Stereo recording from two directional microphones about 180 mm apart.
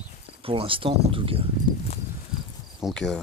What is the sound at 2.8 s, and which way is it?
Speech, centre (ahead or behind).